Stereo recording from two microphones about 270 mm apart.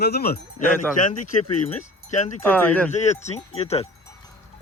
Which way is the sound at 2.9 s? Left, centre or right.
Left.